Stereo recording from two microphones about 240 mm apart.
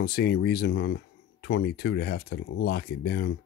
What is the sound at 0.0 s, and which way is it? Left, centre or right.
Speech, left.